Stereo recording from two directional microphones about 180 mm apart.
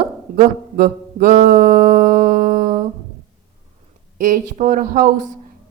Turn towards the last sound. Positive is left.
turn(degrees=-50)  # may be behind; listen again after turning